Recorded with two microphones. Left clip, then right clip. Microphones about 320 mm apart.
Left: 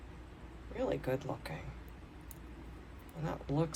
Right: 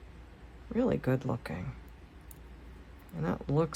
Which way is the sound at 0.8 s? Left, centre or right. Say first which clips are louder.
Right 5 dB; right.